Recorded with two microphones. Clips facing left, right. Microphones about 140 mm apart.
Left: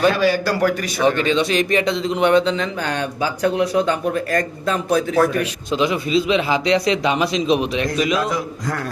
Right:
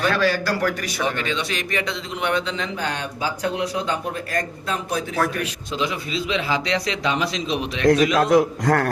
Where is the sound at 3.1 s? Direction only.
65° left (ahead or behind); by 5.0 s 50° left (ahead or behind).